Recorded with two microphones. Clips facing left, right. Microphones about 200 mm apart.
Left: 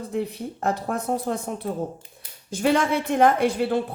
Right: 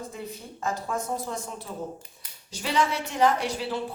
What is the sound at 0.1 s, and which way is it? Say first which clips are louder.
A woman's voice: left 10 dB; 65° left (ahead or behind).